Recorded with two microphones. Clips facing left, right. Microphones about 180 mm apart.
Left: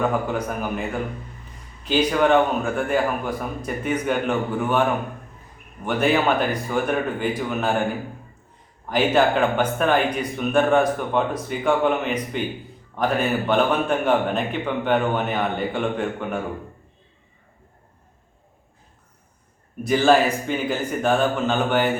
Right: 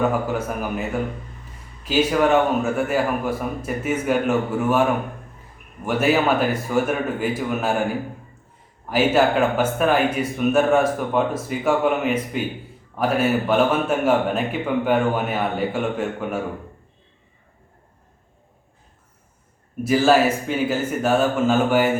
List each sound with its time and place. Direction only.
0.1 s speech: 5° right (ahead or behind)
5.8 s speech: 5° right (ahead or behind)
8.9 s a man's voice: 5° right (ahead or behind)
19.8 s speech: 5° right (ahead or behind)